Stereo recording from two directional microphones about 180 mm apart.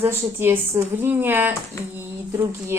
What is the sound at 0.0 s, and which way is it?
A woman's voice, 15° right (ahead or behind).